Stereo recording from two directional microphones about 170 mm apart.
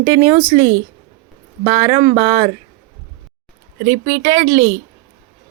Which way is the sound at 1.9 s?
30° right (ahead or behind).